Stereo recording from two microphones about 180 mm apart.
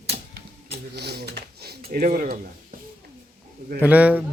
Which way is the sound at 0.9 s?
65° right (ahead or behind).